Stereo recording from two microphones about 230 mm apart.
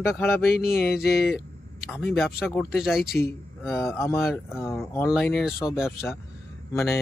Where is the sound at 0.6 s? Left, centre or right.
Left.